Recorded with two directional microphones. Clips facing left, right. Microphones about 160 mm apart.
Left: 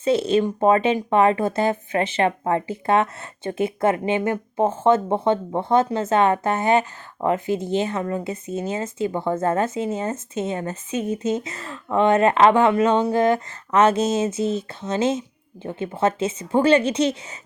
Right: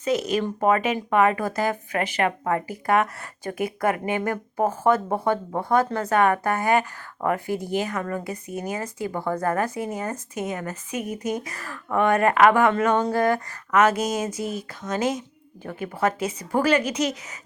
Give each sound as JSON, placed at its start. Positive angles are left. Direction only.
{"t": 0.0, "sound": "speech", "side_deg": 30}